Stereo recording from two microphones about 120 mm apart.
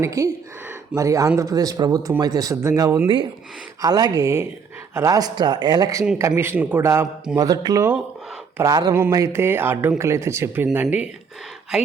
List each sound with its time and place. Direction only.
0.0 s speech: 30° right (ahead or behind)
7.3 s speech: 35° right (ahead or behind)